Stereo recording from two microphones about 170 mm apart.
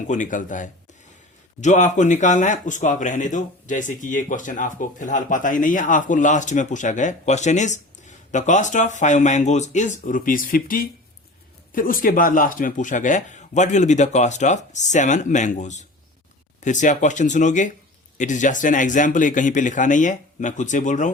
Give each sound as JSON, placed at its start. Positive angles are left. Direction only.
{"t": 0.1, "sound": "speech", "side_deg": 50}